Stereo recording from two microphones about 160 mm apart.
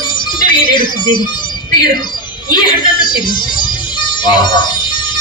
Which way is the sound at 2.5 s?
30° left (ahead or behind).